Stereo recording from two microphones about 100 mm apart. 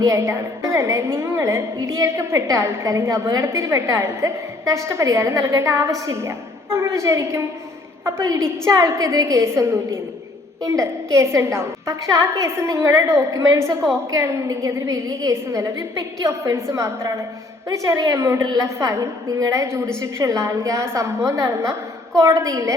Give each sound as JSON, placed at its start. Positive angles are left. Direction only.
{"t": 0.0, "sound": "a woman's voice", "side_deg": -30}